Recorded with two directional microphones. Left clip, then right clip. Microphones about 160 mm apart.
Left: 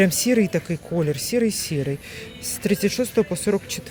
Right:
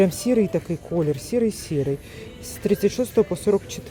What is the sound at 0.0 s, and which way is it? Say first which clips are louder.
Speech: even; 5° right (ahead or behind).